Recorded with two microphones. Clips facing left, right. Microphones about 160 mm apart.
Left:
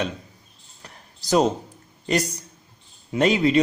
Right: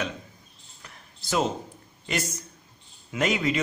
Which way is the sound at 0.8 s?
40° left (ahead or behind).